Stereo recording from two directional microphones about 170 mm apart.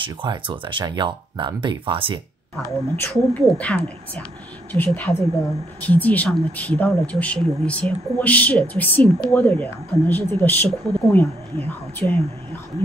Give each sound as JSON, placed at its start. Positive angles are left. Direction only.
{"t": 0.0, "sound": "speech", "side_deg": -30}
{"t": 2.5, "sound": "speech", "side_deg": 10}